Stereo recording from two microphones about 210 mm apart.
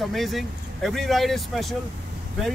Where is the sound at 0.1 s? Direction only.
Centre (ahead or behind).